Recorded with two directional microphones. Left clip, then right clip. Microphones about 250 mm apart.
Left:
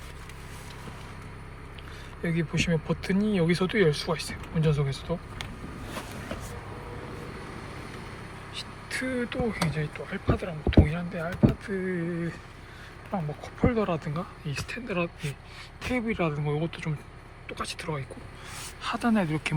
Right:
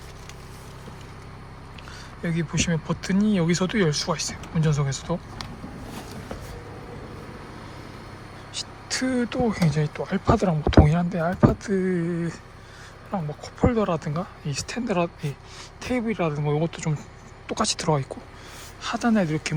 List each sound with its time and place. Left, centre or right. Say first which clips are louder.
2.2 s speech: right 2 dB; centre
8.5 s a sound: right 4 dB; centre
9.7 s speech: right 6 dB; centre
18.8 s speech: right 4 dB; centre